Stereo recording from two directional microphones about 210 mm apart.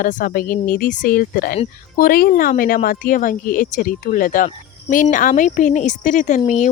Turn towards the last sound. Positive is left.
turn(degrees=35)  # may be behind; listen again after turning